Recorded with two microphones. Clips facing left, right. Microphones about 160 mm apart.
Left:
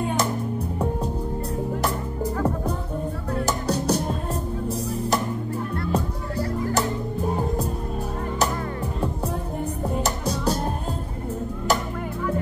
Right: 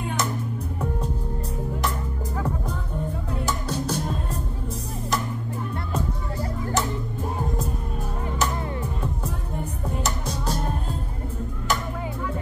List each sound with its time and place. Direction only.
3.4 s music: 40° left (ahead or behind)